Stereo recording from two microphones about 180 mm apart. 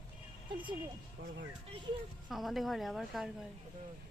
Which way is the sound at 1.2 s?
70° right (ahead or behind).